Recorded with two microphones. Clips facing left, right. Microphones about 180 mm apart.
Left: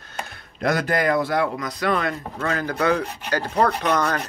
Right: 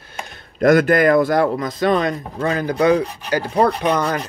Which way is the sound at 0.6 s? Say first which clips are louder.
Right 8 dB; 55° right (ahead or behind).